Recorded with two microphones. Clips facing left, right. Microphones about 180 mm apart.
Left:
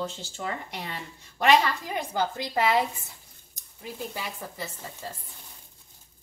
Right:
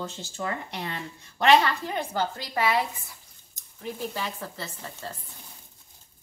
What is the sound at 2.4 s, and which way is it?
A woman's voice, 20° left (ahead or behind).